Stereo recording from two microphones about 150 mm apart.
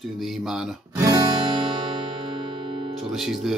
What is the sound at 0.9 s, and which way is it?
Guitar, 25° right (ahead or behind).